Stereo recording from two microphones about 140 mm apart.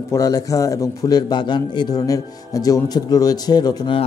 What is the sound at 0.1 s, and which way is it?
A man's voice, 25° left (ahead or behind).